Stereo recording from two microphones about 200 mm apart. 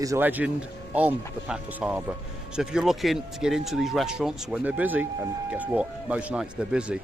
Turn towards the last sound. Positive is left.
turn(degrees=-5)  # may be behind; listen again after turning